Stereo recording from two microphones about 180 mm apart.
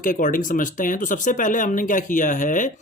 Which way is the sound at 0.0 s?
45° left (ahead or behind).